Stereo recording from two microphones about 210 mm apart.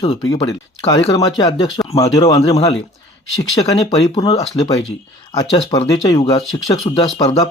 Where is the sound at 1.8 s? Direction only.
10° left (ahead or behind).